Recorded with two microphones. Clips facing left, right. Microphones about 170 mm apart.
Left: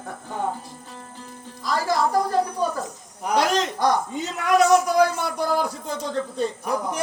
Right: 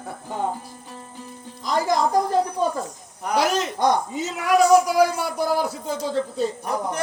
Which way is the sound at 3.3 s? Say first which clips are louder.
Even; 10° right (ahead or behind).